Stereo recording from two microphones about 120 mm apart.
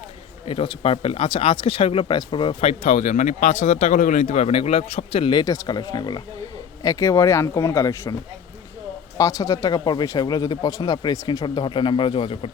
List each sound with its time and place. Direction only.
0.4 s speech: 50° left (ahead or behind)
2.1 s speech: 40° left (ahead or behind)
2.6 s speech: 65° left (ahead or behind); by 8.1 s 25° left (ahead or behind)
9.1 s speech: 30° left (ahead or behind); by 12.5 s 50° left (ahead or behind)